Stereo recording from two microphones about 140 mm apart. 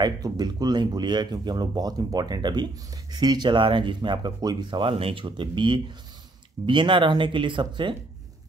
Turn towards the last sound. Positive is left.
turn(degrees=-35)  # may be behind; listen again after turning